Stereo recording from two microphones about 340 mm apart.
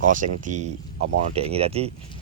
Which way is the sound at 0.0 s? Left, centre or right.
Right.